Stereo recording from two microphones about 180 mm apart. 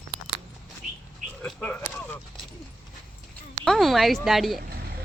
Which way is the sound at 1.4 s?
5° left (ahead or behind).